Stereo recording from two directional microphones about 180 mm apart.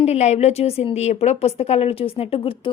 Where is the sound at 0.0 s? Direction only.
35° left (ahead or behind).